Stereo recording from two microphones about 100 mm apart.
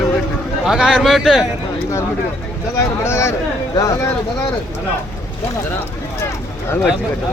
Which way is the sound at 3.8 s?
35° left (ahead or behind).